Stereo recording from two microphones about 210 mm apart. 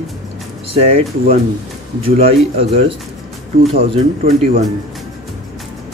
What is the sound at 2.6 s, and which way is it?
Speech, 25° right (ahead or behind).